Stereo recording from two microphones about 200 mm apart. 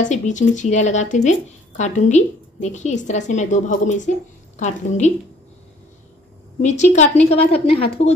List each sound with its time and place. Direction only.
0.0 s a woman's voice: 35° left (ahead or behind)
6.6 s a woman's voice: 35° left (ahead or behind)